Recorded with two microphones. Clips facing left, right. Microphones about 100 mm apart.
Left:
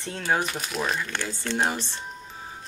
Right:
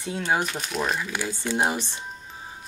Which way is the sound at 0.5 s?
Centre (ahead or behind).